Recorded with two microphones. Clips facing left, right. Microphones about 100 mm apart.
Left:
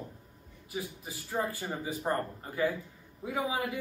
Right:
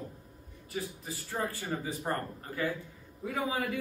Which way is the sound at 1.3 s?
10° left (ahead or behind).